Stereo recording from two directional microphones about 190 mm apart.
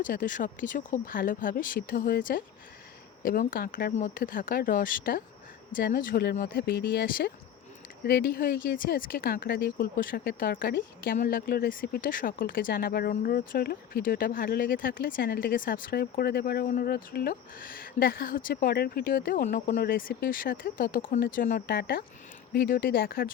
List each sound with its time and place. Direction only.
0.0 s speech: 45° left (ahead or behind)